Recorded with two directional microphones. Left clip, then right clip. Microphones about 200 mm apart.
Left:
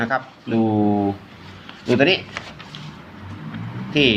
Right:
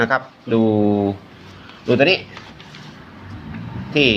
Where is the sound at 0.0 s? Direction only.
20° right (ahead or behind).